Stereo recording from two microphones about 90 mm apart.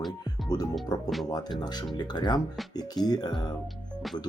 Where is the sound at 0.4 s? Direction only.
45° left (ahead or behind).